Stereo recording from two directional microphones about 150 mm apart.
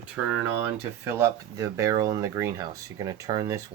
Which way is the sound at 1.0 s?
20° right (ahead or behind).